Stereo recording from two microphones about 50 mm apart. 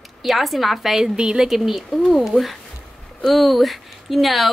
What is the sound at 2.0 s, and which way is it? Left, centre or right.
A child's voice, centre.